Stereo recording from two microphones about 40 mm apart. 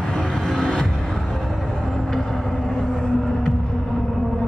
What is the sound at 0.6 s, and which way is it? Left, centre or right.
Music, centre.